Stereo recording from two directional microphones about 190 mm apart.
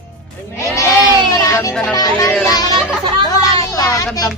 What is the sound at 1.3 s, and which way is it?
Music, 15° left (ahead or behind).